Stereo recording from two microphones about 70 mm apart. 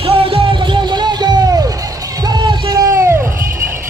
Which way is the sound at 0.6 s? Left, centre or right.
Right.